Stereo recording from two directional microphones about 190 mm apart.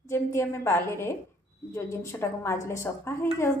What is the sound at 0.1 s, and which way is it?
A woman's voice, 15° left (ahead or behind).